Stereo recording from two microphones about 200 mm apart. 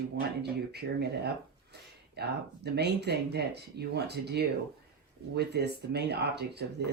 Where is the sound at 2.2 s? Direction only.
55° right (ahead or behind).